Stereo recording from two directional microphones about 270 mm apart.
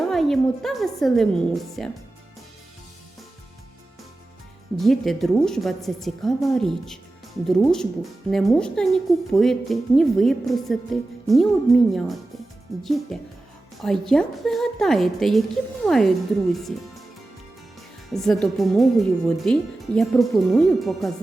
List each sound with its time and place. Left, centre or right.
0.1 s speech: centre
4.8 s speech: centre
18.1 s speech: centre